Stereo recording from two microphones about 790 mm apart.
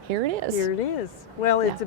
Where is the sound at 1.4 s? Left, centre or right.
Left.